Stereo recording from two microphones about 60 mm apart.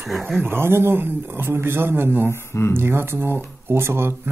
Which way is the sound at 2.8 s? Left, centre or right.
Right.